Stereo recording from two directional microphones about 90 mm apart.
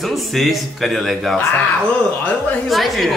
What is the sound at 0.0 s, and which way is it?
Speech, centre (ahead or behind).